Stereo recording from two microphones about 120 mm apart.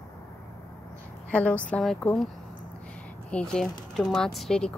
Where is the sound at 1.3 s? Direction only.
10° left (ahead or behind).